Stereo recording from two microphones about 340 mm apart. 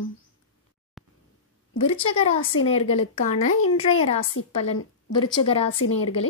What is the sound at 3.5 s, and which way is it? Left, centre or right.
Speech, left.